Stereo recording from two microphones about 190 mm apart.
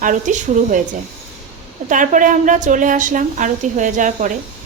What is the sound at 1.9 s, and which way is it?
A woman's voice, 40° right (ahead or behind).